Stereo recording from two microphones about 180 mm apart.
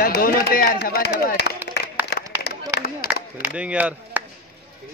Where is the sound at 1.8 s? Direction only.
70° left (ahead or behind).